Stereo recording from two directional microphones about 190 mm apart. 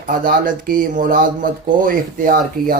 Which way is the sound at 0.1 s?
45° right (ahead or behind).